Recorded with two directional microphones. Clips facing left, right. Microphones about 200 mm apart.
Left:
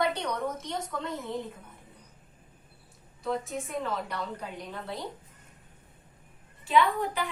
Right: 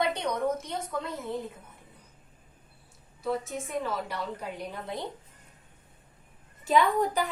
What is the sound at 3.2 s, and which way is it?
Speech, 5° right (ahead or behind).